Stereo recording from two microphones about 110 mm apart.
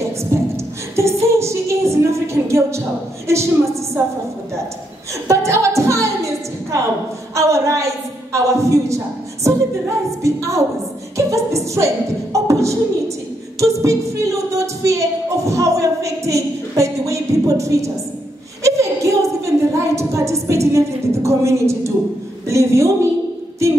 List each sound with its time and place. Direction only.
0.9 s music: 25° right (ahead or behind)
3.3 s a woman's voice: 25° right (ahead or behind)
5.3 s music: 25° right (ahead or behind)
7.3 s a sound: 30° right (ahead or behind)
10.2 s a woman's voice: 30° right (ahead or behind)
11.1 s beatboxing: 30° right (ahead or behind)
13.6 s a sound: 30° right (ahead or behind)